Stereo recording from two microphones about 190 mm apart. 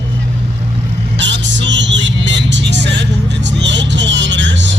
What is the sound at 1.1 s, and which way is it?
Speech, 70° right (ahead or behind).